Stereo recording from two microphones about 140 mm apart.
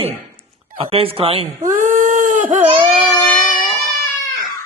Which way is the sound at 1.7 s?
75° right (ahead or behind).